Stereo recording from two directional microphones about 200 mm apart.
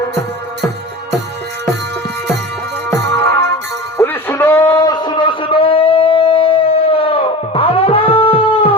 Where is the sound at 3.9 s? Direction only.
10° left (ahead or behind); by 8.4 s 30° left (ahead or behind).